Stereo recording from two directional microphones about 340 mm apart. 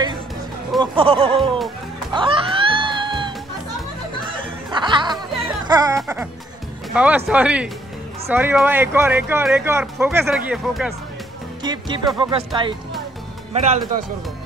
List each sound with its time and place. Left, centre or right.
0.7 s speech: centre
2.1 s music: centre
4.6 s music: centre
5.9 s speech: centre
11.6 s speech: centre